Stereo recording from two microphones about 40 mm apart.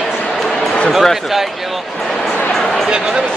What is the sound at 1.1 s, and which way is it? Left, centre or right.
Speech, centre.